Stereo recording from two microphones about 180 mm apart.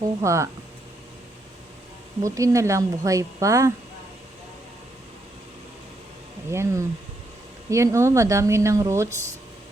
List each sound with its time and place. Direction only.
0.0 s speech: 15° right (ahead or behind)
2.2 s speech: 15° right (ahead or behind)
6.5 s speech: 15° right (ahead or behind)